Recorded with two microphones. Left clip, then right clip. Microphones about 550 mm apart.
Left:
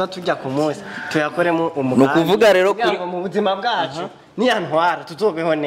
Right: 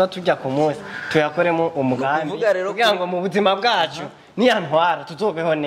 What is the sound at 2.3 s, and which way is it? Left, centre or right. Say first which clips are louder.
Speech: left 7 dB; left.